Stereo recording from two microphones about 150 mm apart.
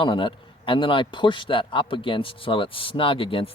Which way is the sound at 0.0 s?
30° left (ahead or behind).